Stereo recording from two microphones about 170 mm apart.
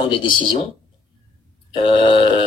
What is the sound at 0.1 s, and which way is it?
Speech, 30° left (ahead or behind).